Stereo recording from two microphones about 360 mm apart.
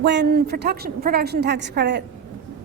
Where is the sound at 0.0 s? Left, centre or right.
Right.